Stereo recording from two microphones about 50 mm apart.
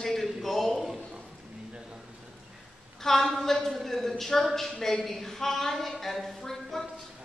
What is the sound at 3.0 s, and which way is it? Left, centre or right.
A woman's voice, centre.